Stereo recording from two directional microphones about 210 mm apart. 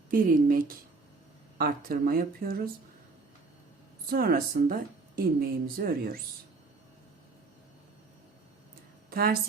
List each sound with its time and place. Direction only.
0.1 s speech: 40° right (ahead or behind)
4.1 s speech: 45° right (ahead or behind)
9.0 s speech: 45° right (ahead or behind)